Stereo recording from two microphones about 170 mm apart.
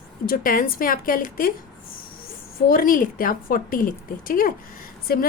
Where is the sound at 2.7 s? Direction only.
55° left (ahead or behind).